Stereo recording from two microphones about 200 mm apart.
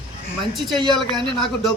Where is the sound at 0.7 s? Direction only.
20° right (ahead or behind).